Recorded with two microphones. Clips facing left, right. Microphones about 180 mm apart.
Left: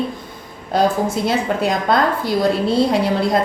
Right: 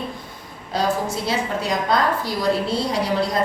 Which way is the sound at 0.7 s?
55° left (ahead or behind).